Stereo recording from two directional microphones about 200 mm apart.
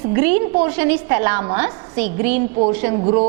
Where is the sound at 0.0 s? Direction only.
15° right (ahead or behind).